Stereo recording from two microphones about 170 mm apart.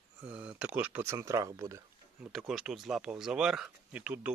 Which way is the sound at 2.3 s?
5° right (ahead or behind).